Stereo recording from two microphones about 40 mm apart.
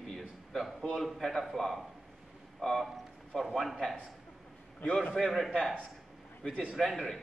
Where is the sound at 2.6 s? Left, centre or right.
Centre.